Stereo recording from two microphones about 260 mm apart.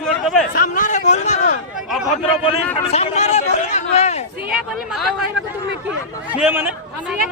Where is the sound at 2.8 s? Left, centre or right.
Left.